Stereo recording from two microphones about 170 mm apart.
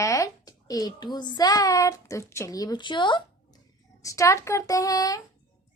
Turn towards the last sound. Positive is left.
turn(degrees=20)  # may be behind; listen again after turning